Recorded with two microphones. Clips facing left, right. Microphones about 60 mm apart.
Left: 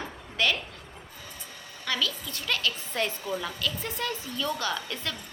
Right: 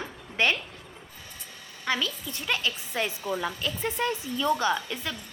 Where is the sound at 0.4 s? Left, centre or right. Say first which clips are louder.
Right 2 dB; right.